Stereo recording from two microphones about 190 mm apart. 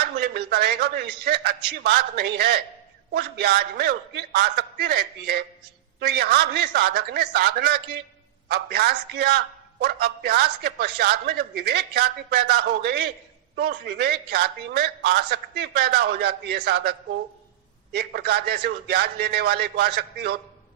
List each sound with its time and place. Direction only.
0.0 s a man's voice: 55° right (ahead or behind)
17.9 s a man's voice: 55° right (ahead or behind)